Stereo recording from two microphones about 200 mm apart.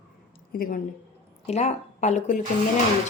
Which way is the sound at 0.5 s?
45° left (ahead or behind).